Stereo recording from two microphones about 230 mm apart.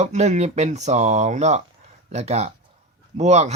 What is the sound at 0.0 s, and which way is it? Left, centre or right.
Speech, right.